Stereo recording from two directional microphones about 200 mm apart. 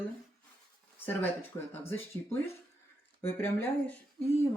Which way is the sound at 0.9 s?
10° left (ahead or behind).